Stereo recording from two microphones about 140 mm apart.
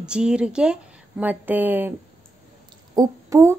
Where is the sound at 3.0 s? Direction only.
20° right (ahead or behind).